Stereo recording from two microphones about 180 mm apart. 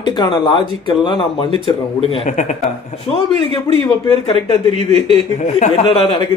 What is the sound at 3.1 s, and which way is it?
Speech, 30° left (ahead or behind).